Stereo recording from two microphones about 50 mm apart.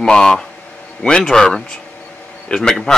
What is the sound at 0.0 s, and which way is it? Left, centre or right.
Speech, centre.